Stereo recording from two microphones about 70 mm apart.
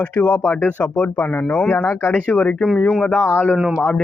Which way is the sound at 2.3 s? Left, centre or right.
Left.